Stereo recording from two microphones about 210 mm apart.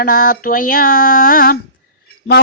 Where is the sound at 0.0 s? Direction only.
45° left (ahead or behind).